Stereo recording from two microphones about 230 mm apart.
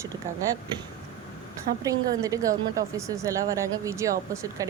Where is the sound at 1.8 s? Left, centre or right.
Centre.